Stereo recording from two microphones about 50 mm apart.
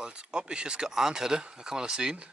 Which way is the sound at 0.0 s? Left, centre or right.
Centre.